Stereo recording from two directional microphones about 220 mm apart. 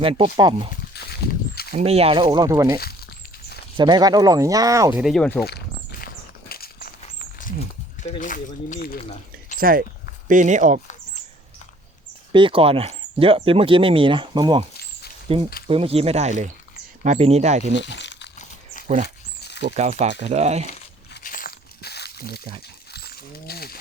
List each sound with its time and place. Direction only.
0.0 s speech: 25° right (ahead or behind)
1.7 s speech: 30° right (ahead or behind)
3.8 s speech: 20° right (ahead or behind); by 5.5 s 5° left (ahead or behind)
5.5 s walk: 45° left (ahead or behind)
6.5 s a sound: 45° left (ahead or behind)
8.0 s speech: 35° left (ahead or behind)
9.6 s speech: 40° right (ahead or behind)
12.3 s speech: 25° right (ahead or behind)
17.8 s crumpling: 55° left (ahead or behind)
18.3 s a sound: 35° left (ahead or behind)
19.0 s a sound: 50° left (ahead or behind)
19.7 s speech: 30° right (ahead or behind)
21.1 s a sound: 40° left (ahead or behind)
22.9 s wild animals: 45° left (ahead or behind)